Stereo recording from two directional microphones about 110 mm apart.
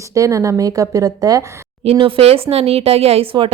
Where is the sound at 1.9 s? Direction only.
55° right (ahead or behind).